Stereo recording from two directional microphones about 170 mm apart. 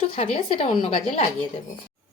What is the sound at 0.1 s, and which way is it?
Speech, 40° left (ahead or behind).